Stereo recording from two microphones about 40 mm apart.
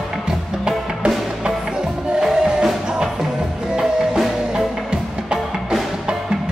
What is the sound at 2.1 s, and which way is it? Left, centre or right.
Music, centre.